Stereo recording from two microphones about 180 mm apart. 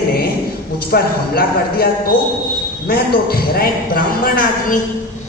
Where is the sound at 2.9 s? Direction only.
60° left (ahead or behind).